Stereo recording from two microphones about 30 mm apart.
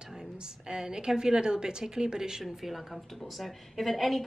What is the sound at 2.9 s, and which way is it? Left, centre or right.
A woman's voice, centre.